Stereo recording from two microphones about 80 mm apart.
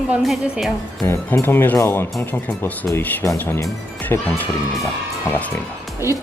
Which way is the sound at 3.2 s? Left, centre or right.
Left.